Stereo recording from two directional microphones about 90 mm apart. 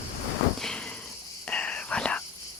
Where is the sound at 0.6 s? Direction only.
5° left (ahead or behind).